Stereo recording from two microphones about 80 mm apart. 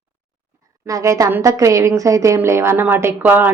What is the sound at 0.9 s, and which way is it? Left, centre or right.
A woman's voice, right.